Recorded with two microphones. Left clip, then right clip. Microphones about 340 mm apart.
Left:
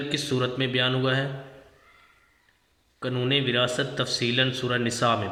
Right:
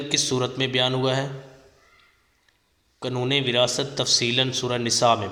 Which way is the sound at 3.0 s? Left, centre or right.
Centre.